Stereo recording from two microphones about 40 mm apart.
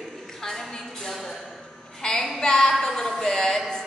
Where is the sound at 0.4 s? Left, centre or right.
Centre.